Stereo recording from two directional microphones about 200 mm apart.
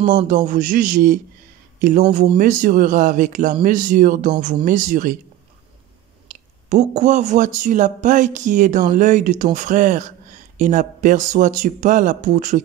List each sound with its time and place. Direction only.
0.5 s a man's voice: 40° right (ahead or behind)
6.7 s speech: 40° right (ahead or behind)